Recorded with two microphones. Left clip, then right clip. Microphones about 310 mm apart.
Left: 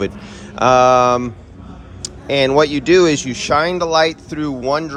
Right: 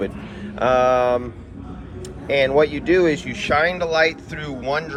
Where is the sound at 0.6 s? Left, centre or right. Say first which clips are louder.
Left 6 dB; centre.